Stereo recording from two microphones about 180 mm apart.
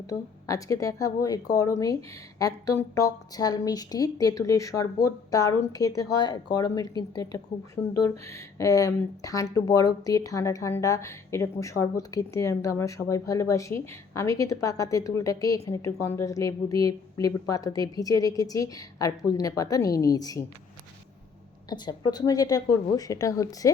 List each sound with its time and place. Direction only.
0.1 s a woman's voice: 20° left (ahead or behind)
21.7 s a woman's voice: 25° left (ahead or behind)